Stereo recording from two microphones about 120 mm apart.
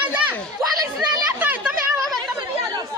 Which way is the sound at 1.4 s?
15° right (ahead or behind).